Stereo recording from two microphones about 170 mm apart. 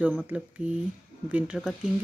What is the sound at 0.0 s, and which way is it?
Speech, 10° right (ahead or behind).